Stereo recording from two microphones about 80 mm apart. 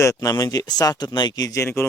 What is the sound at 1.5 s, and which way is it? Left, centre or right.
Speech, left.